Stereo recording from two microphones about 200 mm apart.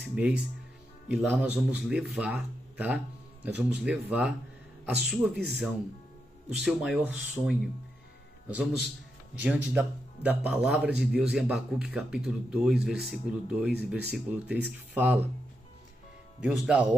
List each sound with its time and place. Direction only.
0.1 s speech: 5° right (ahead or behind)
5.3 s speech: 55° right (ahead or behind)
6.5 s speech: 5° right (ahead or behind)
16.4 s speech: 5° right (ahead or behind)